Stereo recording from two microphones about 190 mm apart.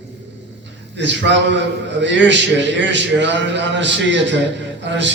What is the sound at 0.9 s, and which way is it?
Speech, 70° right (ahead or behind).